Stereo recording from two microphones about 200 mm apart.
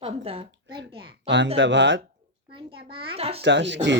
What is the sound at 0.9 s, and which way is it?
Speech, 25° right (ahead or behind).